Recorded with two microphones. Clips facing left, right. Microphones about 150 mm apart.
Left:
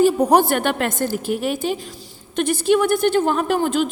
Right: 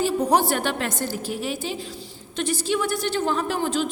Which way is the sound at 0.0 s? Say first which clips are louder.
Left 6 dB; 55° left (ahead or behind).